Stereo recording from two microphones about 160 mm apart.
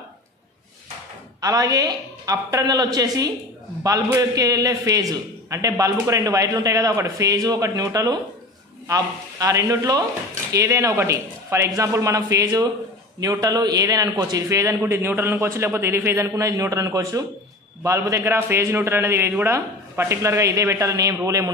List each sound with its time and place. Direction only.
1.4 s a man's voice: 20° right (ahead or behind)